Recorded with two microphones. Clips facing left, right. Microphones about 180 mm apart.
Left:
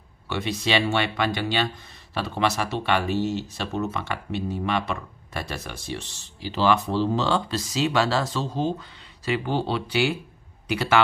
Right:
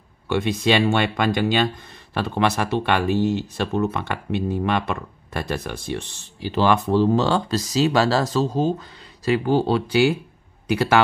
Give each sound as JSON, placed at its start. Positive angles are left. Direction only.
{"t": 0.3, "sound": "speech", "side_deg": -50}